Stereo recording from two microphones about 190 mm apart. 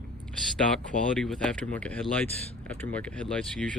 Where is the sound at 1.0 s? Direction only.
5° left (ahead or behind).